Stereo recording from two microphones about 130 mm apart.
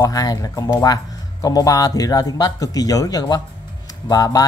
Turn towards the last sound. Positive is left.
turn(degrees=30)  # may be behind; listen again after turning